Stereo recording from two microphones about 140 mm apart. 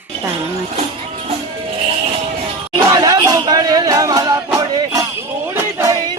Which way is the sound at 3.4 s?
30° right (ahead or behind).